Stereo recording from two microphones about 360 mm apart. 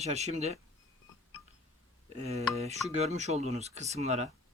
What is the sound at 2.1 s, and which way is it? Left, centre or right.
Speech, centre.